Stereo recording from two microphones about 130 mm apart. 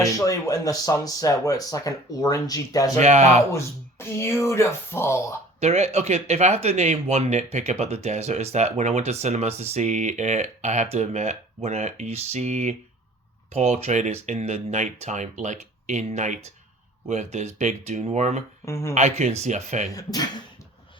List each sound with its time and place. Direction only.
0.0 s speech: 25° left (ahead or behind)
3.0 s speech: 60° right (ahead or behind)
3.5 s speech: 20° left (ahead or behind)
5.5 s speech: 55° right (ahead or behind)
18.6 s speech: 20° left (ahead or behind)
18.9 s speech: 60° right (ahead or behind)
19.9 s speech: 30° left (ahead or behind)